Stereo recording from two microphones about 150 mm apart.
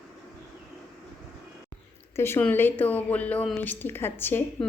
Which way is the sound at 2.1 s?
15° left (ahead or behind).